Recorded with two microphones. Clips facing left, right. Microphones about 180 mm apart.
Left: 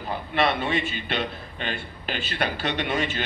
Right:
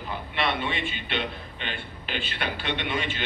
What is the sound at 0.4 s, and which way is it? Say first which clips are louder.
A man's voice: left 5 dB; 45° left (ahead or behind).